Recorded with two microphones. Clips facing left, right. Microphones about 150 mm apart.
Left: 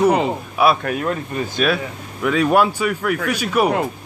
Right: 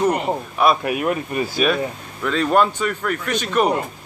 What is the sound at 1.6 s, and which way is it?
Speech, 5° left (ahead or behind).